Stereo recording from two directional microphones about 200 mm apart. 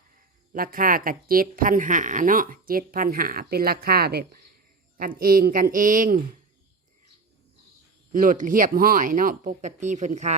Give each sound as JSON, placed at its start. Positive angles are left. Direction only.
{"t": 0.5, "sound": "speech", "side_deg": -45}
{"t": 8.1, "sound": "speech", "side_deg": -40}